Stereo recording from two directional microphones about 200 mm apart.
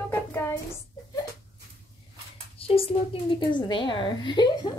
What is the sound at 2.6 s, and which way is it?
A woman's voice, 30° left (ahead or behind).